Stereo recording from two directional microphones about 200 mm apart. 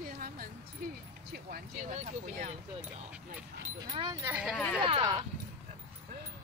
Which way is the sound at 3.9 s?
20° right (ahead or behind).